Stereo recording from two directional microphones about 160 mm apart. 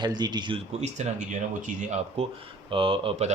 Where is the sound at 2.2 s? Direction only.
40° right (ahead or behind).